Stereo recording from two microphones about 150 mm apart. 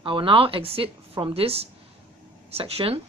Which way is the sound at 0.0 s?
35° right (ahead or behind).